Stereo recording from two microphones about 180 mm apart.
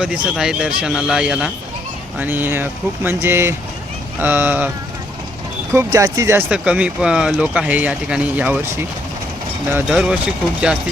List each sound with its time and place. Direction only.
0.0 s speech: 5° right (ahead or behind)
5.7 s speech: 20° right (ahead or behind)
6.5 s speech: 5° right (ahead or behind)
9.7 s speech: 5° right (ahead or behind)